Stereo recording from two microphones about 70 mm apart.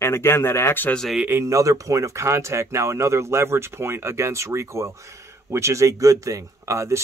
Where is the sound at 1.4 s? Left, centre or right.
Right.